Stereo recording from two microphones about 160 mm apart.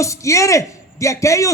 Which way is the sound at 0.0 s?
20° left (ahead or behind).